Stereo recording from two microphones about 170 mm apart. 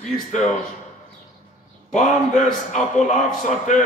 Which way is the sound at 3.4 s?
45° left (ahead or behind).